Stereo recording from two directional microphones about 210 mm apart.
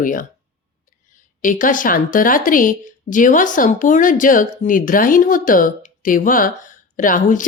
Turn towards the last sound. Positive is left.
turn(degrees=40)  # may be behind; listen again after turning